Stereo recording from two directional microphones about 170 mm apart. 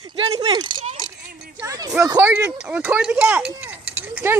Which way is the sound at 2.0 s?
15° right (ahead or behind).